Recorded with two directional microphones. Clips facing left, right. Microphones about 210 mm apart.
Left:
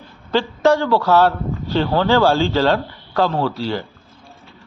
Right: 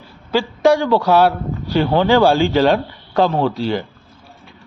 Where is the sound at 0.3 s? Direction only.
10° right (ahead or behind).